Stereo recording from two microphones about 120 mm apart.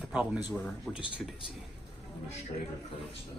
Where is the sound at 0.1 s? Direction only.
10° right (ahead or behind).